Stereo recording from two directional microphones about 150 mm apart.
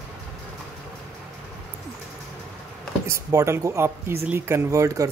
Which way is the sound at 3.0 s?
20° right (ahead or behind).